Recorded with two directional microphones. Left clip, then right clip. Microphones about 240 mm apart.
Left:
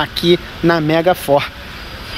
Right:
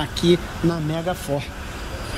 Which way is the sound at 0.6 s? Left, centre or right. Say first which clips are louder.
Left 13 dB; left.